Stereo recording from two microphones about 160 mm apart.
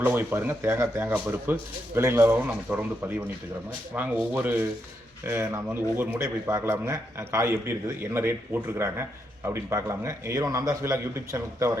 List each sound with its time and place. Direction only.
0.0 s a man's voice: 10° right (ahead or behind)
8.8 s a man's voice: 15° right (ahead or behind)